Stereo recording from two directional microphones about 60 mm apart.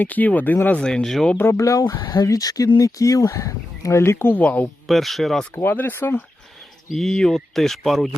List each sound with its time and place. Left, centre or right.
0.0 s speech: left
0.8 s speech: centre
1.4 s speech: left
4.0 s speech: left
4.4 s speech: left
4.9 s speech: centre
5.6 s speech: left
6.9 s speech: centre